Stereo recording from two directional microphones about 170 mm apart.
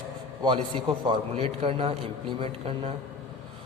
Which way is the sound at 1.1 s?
35° right (ahead or behind).